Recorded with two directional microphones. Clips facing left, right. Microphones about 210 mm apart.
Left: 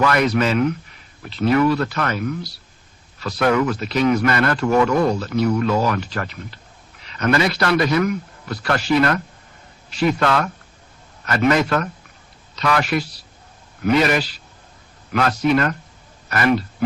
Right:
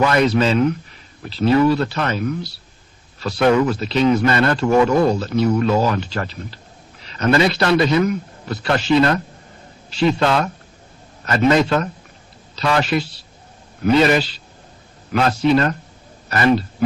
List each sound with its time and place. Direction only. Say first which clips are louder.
0.0 s speech: right 2 dB; 25° right (ahead or behind)